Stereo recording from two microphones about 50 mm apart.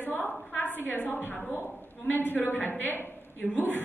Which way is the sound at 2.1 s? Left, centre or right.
Left.